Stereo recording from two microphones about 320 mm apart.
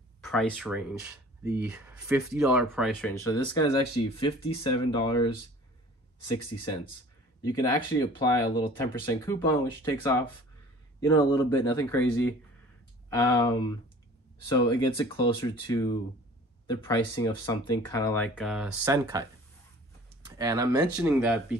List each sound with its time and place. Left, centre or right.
0.2 s speech: centre
6.3 s speech: centre
20.2 s speech: centre